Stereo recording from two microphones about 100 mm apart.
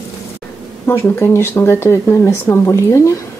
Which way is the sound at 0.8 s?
25° left (ahead or behind).